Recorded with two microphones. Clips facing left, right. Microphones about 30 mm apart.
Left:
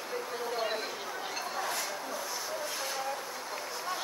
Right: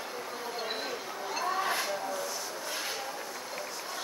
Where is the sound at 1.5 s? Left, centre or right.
Right.